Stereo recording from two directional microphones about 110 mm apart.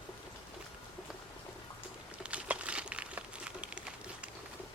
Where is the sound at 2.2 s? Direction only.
10° right (ahead or behind).